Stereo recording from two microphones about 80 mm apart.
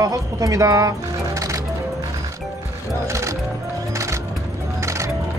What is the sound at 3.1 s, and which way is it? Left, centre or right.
Music, right.